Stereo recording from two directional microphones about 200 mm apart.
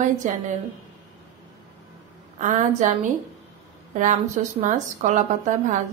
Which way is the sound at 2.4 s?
40° right (ahead or behind).